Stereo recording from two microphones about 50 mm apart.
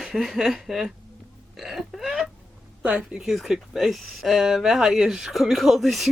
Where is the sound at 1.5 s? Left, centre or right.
Centre.